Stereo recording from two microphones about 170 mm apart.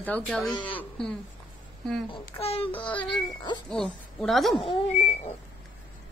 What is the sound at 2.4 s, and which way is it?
Child singing, 35° left (ahead or behind).